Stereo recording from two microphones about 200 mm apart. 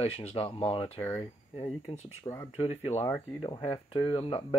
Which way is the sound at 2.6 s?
30° left (ahead or behind).